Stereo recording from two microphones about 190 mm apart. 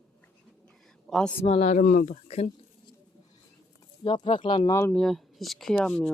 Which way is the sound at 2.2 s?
35° left (ahead or behind).